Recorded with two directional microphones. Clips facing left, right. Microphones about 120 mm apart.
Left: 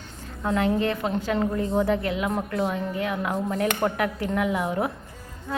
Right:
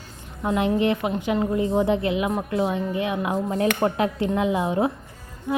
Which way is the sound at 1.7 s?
20° right (ahead or behind).